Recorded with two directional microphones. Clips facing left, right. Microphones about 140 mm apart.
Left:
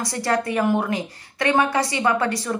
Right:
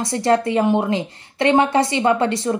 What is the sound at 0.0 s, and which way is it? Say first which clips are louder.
A woman's voice: right 5 dB; 25° right (ahead or behind).